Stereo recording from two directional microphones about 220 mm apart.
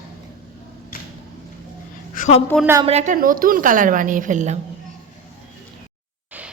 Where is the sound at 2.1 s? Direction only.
35° left (ahead or behind).